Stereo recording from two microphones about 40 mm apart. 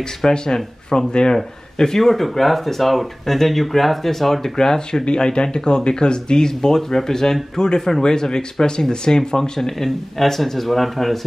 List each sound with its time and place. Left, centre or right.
0.2 s speech: centre